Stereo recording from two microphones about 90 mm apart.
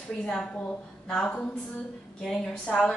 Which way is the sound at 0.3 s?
10° left (ahead or behind).